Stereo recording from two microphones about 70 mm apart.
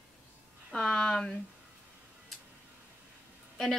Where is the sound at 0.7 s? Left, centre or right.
Centre.